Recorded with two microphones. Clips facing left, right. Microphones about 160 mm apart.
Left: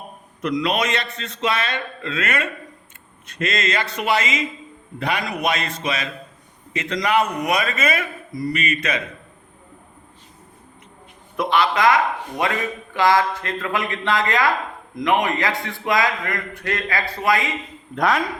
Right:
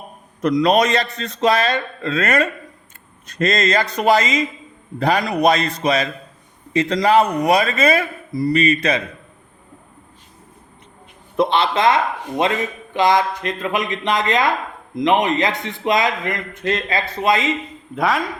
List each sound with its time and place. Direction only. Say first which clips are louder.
0.4 s speech: right 6 dB; 40° right (ahead or behind)
11.3 s a man's voice: right 2 dB; 25° right (ahead or behind)
17.9 s a man's voice: even; centre (ahead or behind)